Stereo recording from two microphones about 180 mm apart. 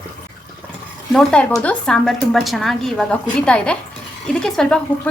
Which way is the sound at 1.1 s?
5° left (ahead or behind).